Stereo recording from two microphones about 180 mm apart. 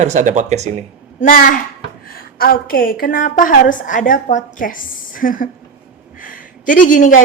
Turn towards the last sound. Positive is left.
turn(degrees=45)  # may be behind; listen again after turning